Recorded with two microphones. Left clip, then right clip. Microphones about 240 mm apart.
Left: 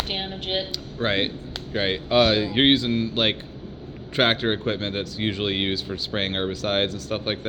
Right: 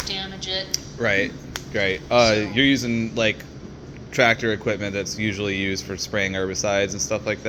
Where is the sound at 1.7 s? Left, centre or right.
Centre.